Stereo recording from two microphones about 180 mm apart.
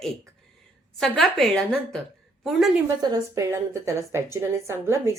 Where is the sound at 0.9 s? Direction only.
Centre (ahead or behind).